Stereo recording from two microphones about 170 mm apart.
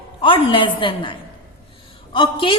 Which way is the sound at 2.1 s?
30° left (ahead or behind).